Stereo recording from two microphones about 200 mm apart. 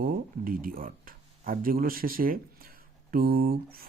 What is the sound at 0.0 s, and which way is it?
Speech, 45° right (ahead or behind).